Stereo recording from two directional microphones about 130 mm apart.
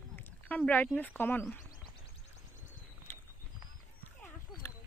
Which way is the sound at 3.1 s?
15° left (ahead or behind).